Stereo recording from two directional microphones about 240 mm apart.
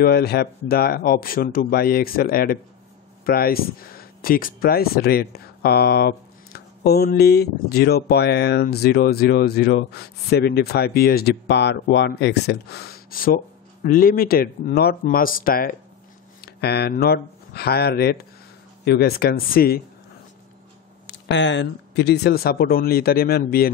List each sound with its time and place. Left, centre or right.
0.0 s speech: left
21.1 s speech: left